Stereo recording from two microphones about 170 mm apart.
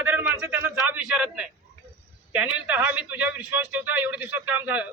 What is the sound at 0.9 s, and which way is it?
Speech, 10° right (ahead or behind).